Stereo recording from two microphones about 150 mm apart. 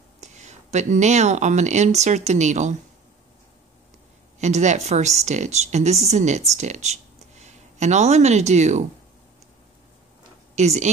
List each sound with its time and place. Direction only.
0.2 s speech: 50° right (ahead or behind)
4.4 s speech: 50° right (ahead or behind)
10.5 s speech: 50° right (ahead or behind)